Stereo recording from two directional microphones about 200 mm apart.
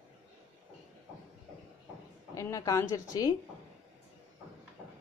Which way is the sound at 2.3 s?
15° left (ahead or behind).